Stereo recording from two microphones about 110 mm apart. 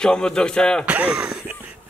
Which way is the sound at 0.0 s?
5° left (ahead or behind).